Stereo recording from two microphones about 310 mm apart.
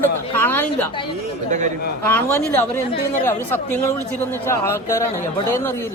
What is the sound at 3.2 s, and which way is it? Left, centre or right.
Speech, centre.